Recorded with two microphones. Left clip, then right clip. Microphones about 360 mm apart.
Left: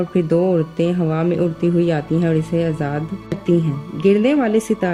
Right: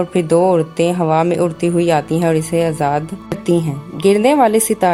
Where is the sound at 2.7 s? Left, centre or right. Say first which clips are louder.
Right 8 dB; right.